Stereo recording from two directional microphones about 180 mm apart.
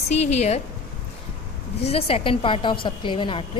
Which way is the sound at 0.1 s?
35° left (ahead or behind).